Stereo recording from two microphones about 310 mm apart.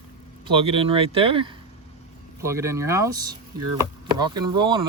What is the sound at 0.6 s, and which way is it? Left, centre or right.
Speech, centre.